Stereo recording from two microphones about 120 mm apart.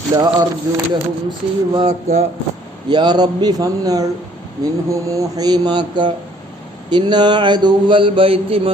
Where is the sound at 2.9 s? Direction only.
35° right (ahead or behind).